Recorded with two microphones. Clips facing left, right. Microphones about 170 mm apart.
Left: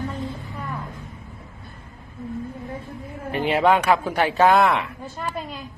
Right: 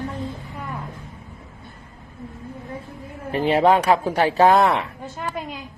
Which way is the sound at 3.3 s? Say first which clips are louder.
Right 2 dB; 35° right (ahead or behind).